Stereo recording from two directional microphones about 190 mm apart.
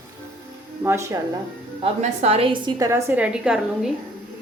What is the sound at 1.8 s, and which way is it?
A woman's voice, 35° right (ahead or behind).